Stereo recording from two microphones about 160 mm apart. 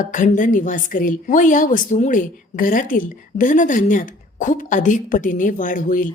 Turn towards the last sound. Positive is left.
turn(degrees=55)  # may be behind; listen again after turning